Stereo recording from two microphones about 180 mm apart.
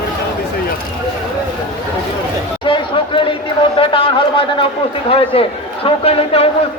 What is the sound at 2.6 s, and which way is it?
Chatter, 30° left (ahead or behind).